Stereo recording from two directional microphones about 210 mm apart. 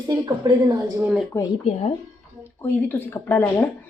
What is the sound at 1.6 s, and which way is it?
Speech, 30° left (ahead or behind).